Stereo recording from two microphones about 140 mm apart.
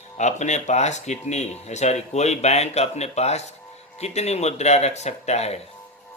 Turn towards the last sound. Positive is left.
turn(degrees=50)  # may be behind; listen again after turning